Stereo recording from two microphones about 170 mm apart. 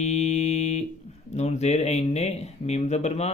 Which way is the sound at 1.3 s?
40° left (ahead or behind).